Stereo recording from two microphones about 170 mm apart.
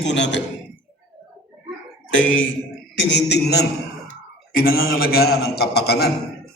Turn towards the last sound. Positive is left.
turn(degrees=70)  # may be behind; listen again after turning